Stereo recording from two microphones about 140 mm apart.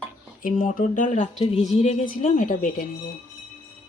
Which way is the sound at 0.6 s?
75° left (ahead or behind).